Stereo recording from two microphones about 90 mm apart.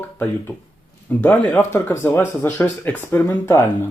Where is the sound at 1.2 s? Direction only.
20° left (ahead or behind).